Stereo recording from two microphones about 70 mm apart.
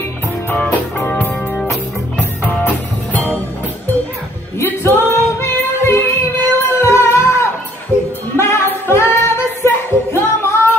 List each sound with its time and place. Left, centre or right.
0.6 s music: centre
4.6 s female singing: left
6.6 s music: left
8.4 s singing: left